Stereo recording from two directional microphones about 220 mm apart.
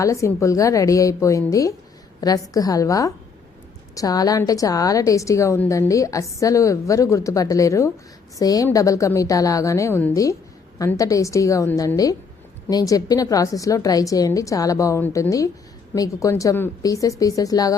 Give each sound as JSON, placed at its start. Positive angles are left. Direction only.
{"t": 0.0, "sound": "a woman's voice", "side_deg": 15}